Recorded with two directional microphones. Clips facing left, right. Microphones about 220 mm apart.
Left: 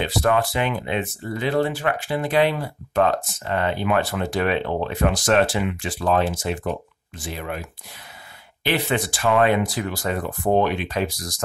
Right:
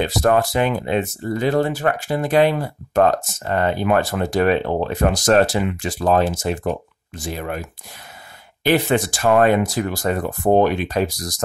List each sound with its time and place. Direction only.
0.0 s speech: 40° right (ahead or behind)
8.6 s speech: 45° right (ahead or behind)